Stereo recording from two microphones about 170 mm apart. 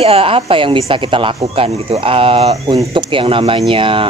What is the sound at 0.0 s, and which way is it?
Speech, 35° right (ahead or behind).